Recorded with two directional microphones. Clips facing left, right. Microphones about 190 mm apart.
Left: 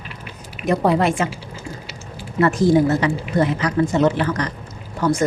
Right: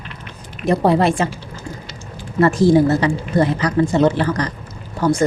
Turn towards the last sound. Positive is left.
turn(degrees=-30)  # may be behind; listen again after turning